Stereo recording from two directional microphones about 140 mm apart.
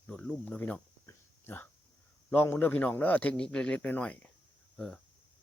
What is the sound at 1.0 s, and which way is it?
Whispering, 15° left (ahead or behind).